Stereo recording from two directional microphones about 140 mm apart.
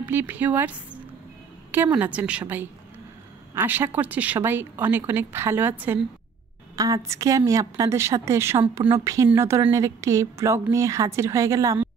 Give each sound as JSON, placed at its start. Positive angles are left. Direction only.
{"t": 0.0, "sound": "a woman's voice", "side_deg": -15}